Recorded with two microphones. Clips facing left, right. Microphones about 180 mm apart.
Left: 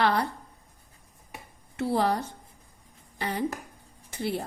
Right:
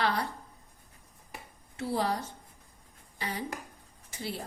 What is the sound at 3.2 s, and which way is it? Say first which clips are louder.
Speech: left 5 dB; 60° left (ahead or behind).